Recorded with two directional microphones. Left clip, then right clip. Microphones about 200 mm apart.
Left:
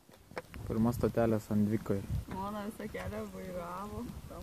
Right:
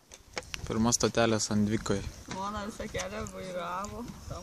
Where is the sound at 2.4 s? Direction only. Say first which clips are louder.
Right 5 dB; 35° left (ahead or behind).